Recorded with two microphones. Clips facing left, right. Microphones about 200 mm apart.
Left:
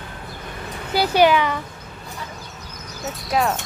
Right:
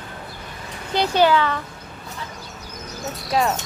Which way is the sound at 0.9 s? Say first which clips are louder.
Left 1 dB; 10° left (ahead or behind).